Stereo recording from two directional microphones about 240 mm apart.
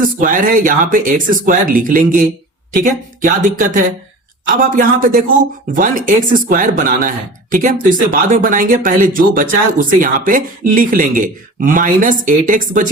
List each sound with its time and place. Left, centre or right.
0.0 s speech: right